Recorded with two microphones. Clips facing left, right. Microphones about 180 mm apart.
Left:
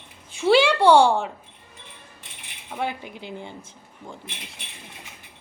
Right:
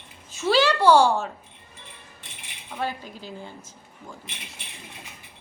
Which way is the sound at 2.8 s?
15° left (ahead or behind).